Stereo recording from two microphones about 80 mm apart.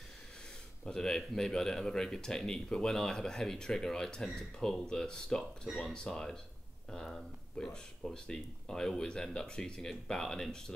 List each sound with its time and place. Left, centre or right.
0.8 s speech: centre